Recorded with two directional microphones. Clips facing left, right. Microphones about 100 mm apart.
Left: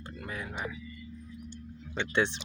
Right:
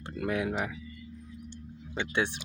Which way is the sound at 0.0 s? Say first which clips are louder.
Right 9 dB; 70° right (ahead or behind).